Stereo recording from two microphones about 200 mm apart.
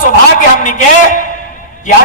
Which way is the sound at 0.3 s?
40° left (ahead or behind).